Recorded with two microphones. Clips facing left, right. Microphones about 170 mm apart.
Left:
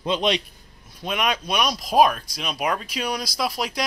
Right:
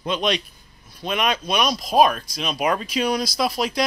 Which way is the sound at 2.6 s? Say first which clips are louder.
Right 4 dB; centre (ahead or behind).